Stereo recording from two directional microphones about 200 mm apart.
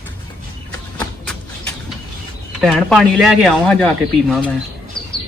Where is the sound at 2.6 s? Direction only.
5° right (ahead or behind).